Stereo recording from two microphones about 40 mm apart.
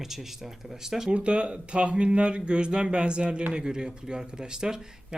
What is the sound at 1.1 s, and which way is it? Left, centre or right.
Speech, right.